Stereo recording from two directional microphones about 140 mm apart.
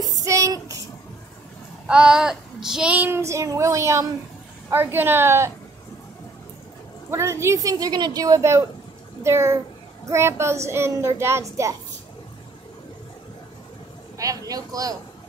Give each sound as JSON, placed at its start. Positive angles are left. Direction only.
{"t": 0.2, "sound": "child singing", "side_deg": -25}
{"t": 1.9, "sound": "child singing", "side_deg": -5}
{"t": 7.1, "sound": "a woman's voice", "side_deg": -20}
{"t": 14.1, "sound": "a woman's voice", "side_deg": -25}